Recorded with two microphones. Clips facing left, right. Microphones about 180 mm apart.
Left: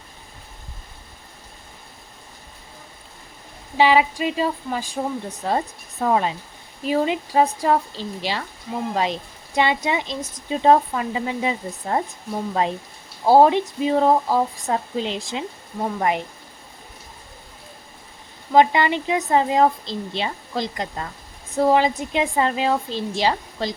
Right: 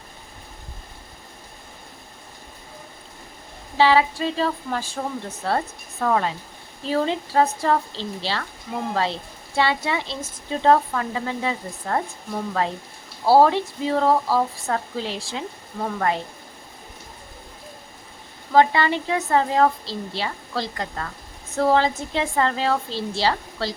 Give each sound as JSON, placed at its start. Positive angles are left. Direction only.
{"t": 3.8, "sound": "speech", "side_deg": 15}
{"t": 9.6, "sound": "speech", "side_deg": 15}
{"t": 13.2, "sound": "speech", "side_deg": 15}
{"t": 18.5, "sound": "speech", "side_deg": 15}